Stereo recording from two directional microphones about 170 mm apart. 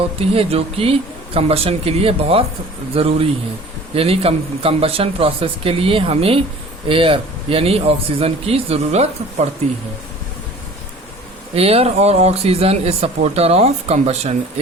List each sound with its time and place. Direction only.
0.2 s speech: 35° right (ahead or behind)
11.5 s speech: 35° right (ahead or behind)